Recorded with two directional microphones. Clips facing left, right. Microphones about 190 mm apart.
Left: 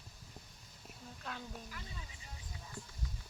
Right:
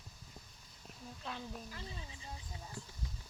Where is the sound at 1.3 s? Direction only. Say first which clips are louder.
Right 1 dB; 5° right (ahead or behind).